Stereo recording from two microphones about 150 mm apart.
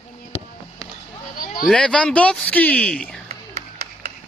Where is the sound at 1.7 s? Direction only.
5° left (ahead or behind).